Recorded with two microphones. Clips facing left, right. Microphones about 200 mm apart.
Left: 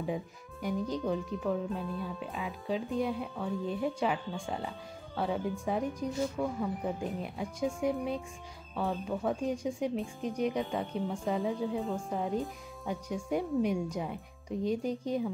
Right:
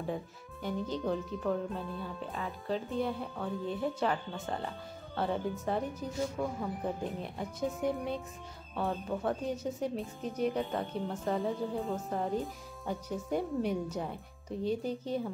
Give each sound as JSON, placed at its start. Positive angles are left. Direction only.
{"t": 0.6, "sound": "speech", "side_deg": 0}
{"t": 9.5, "sound": "speech", "side_deg": 10}
{"t": 9.9, "sound": "speech", "side_deg": -5}
{"t": 14.6, "sound": "speech", "side_deg": -35}